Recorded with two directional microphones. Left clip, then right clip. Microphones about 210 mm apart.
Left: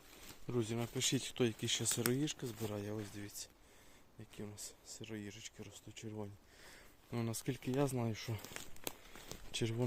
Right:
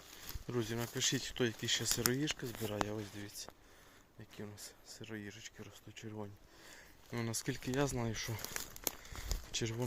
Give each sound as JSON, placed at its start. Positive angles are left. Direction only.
{"t": 0.4, "sound": "speech", "side_deg": 15}
{"t": 2.6, "sound": "speech", "side_deg": 0}
{"t": 7.1, "sound": "speech", "side_deg": 15}
{"t": 8.4, "sound": "speech", "side_deg": -55}
{"t": 9.5, "sound": "speech", "side_deg": 20}